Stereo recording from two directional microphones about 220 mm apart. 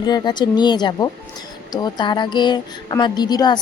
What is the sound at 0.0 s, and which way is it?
Speech, 20° left (ahead or behind).